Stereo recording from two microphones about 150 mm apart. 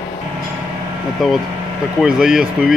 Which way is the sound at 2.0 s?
5° right (ahead or behind).